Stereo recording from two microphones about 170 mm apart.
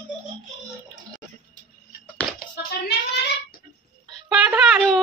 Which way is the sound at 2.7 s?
70° left (ahead or behind).